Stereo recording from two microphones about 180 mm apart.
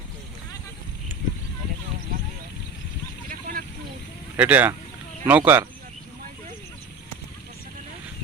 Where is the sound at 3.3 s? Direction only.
50° right (ahead or behind).